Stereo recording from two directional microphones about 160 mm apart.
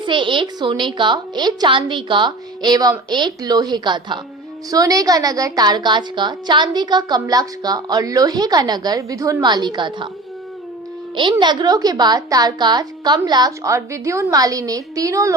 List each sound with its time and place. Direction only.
0.0 s a woman's voice: 30° right (ahead or behind)
11.1 s a woman's voice: 30° right (ahead or behind)